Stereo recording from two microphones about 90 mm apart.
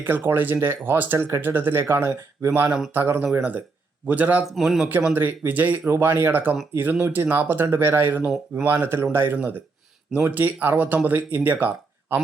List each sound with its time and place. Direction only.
0.3 s a man's voice: 25° right (ahead or behind)
4.5 s speech: centre (ahead or behind)
5.1 s speech: 25° right (ahead or behind)
8.2 s speech: 5° right (ahead or behind)
8.6 s speech: 25° right (ahead or behind)